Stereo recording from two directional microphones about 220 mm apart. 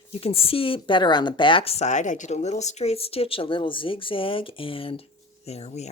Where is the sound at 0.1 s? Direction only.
25° left (ahead or behind).